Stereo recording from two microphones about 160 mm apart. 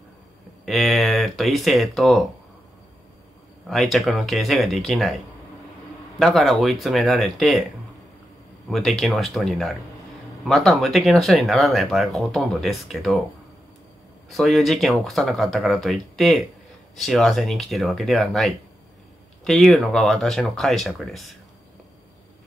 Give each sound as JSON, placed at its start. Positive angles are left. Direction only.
{"t": 0.7, "sound": "speech", "side_deg": 0}
{"t": 3.6, "sound": "speech", "side_deg": 0}
{"t": 6.1, "sound": "speech", "side_deg": 0}
{"t": 8.6, "sound": "speech", "side_deg": 0}
{"t": 14.3, "sound": "speech", "side_deg": 0}